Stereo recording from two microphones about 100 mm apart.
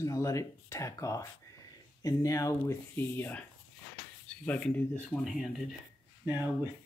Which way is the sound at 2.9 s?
20° left (ahead or behind).